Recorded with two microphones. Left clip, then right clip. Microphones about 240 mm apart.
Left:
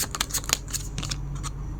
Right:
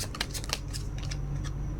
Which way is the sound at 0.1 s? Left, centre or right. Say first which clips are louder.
Left 7 dB; left.